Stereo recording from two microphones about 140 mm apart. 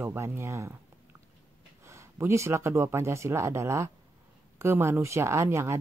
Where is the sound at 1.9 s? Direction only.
20° right (ahead or behind).